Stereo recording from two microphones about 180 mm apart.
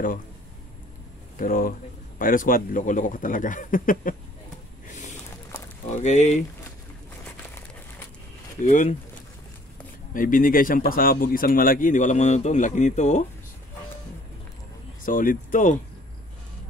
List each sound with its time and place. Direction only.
1.4 s speech: 50° left (ahead or behind)
5.9 s speech: 40° left (ahead or behind)
8.6 s speech: 45° left (ahead or behind)
10.1 s speech: 50° left (ahead or behind)
15.0 s speech: 50° left (ahead or behind)